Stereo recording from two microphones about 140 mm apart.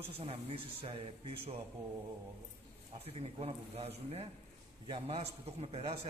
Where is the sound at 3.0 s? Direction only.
45° right (ahead or behind).